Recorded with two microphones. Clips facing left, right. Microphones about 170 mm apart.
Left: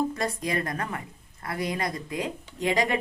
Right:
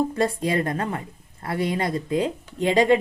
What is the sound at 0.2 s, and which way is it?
A woman's voice, 30° right (ahead or behind).